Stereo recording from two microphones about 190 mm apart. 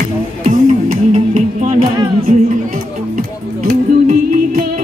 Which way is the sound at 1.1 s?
35° right (ahead or behind).